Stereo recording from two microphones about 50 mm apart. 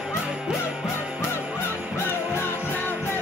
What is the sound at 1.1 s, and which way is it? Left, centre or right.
Music, left.